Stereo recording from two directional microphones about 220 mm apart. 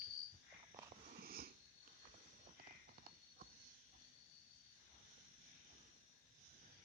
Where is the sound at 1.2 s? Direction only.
40° right (ahead or behind).